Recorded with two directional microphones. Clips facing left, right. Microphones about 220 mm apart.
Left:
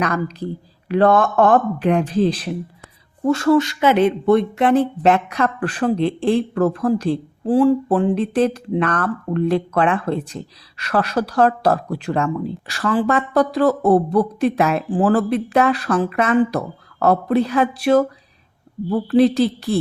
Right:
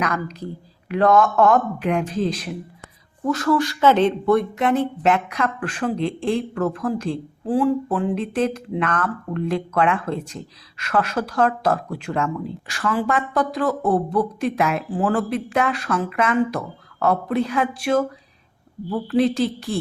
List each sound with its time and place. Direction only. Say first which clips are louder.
0.0 s speech: left 4 dB; 30° left (ahead or behind); by 4.1 s 10° left (ahead or behind)
4.3 s speech: left 3 dB; 25° left (ahead or behind)